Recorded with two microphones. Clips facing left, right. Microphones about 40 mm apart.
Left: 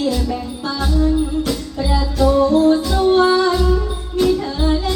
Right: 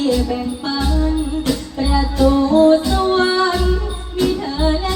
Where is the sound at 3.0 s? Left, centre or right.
Right.